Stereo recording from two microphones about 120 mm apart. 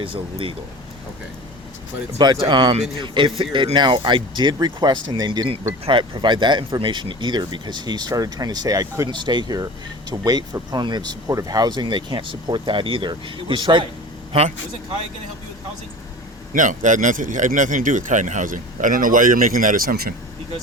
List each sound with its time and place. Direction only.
0.0 s a man's voice: 50° right (ahead or behind)
2.1 s a man's voice: 40° right (ahead or behind)
16.6 s speech: 90° right